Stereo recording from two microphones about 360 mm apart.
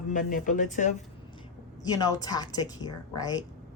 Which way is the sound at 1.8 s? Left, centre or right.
Centre.